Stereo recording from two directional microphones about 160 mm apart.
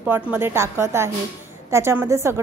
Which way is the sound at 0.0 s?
10° right (ahead or behind).